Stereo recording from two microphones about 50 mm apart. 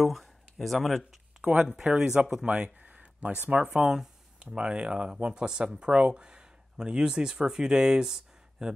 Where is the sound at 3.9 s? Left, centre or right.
Centre.